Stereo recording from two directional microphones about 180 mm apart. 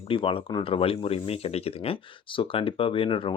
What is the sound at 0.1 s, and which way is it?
Speech, 30° left (ahead or behind).